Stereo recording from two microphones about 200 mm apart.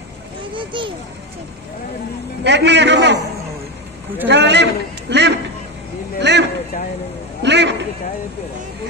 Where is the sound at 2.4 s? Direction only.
60° right (ahead or behind).